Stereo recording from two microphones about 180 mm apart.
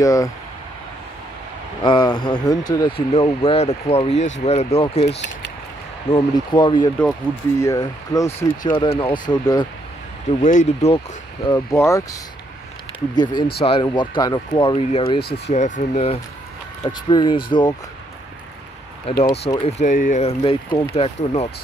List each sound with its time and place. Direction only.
0.0 s speech: 20° left (ahead or behind)
1.8 s speech: 25° left (ahead or behind)
3.1 s speech: 30° left (ahead or behind)
6.1 s speech: 25° left (ahead or behind)
7.0 s speech: 10° left (ahead or behind)
8.3 s speech: 30° left (ahead or behind)
10.4 s speech: 45° left (ahead or behind)
11.4 s speech: 20° left (ahead or behind); by 16.2 s 35° left (ahead or behind)
16.8 s speech: 25° left (ahead or behind)
19.1 s speech: 30° left (ahead or behind)
19.8 s speech: 45° left (ahead or behind)